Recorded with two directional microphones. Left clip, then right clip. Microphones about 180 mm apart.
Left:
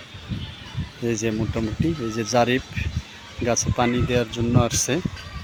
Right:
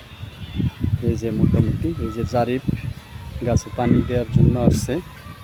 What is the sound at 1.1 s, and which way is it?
Speech, 10° right (ahead or behind).